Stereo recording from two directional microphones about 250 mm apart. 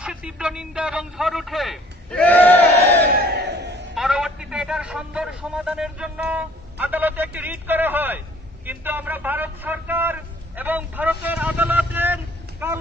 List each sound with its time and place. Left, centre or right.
0.0 s a man's voice: centre
3.0 s crowd: right
3.9 s a man's voice: centre